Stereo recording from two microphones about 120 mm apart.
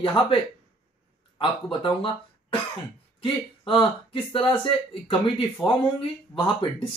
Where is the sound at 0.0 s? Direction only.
45° left (ahead or behind).